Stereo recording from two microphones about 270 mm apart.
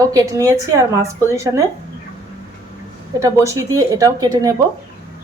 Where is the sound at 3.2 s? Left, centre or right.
Centre.